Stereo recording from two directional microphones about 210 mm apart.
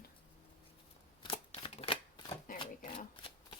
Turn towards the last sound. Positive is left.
turn(degrees=25)  # may be behind; listen again after turning